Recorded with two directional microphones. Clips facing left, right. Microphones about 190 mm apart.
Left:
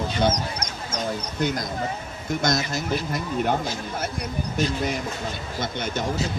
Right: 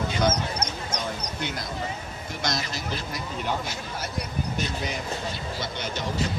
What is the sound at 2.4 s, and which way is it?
Speech, 45° left (ahead or behind).